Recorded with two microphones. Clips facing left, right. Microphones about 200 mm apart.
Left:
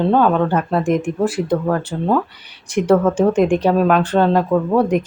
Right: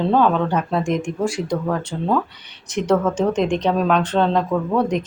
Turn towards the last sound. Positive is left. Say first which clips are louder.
# left 4 dB
turn(degrees=10)  # may be behind; listen again after turning